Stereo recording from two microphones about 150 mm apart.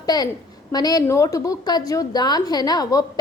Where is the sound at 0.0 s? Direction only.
25° left (ahead or behind).